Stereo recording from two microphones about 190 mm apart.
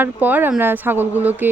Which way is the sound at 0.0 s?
10° right (ahead or behind).